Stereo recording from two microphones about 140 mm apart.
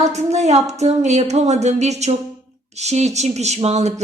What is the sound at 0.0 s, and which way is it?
A woman's voice, 55° right (ahead or behind).